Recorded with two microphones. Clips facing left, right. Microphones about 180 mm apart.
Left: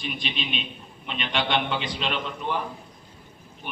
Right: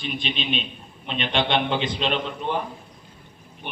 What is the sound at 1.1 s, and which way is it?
A man's voice, 30° right (ahead or behind).